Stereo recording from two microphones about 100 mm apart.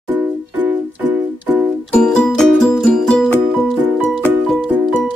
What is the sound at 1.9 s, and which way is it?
Music, 5° left (ahead or behind).